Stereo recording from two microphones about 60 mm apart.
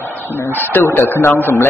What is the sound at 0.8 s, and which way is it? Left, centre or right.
Speech, left.